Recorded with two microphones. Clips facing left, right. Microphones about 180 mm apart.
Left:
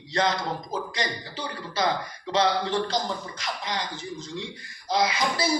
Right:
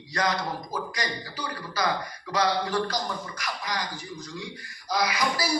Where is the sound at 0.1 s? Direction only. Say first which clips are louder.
Left 2 dB; 25° left (ahead or behind).